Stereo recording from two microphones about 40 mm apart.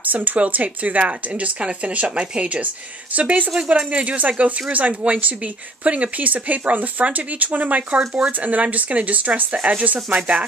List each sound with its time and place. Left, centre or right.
0.0 s a woman's voice: right